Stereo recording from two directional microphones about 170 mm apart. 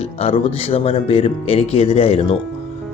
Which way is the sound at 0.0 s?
35° left (ahead or behind).